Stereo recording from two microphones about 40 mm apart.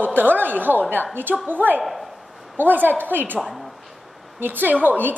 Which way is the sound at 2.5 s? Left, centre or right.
Right.